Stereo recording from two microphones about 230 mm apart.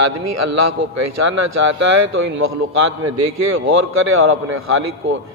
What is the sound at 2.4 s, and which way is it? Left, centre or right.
A man's voice, right.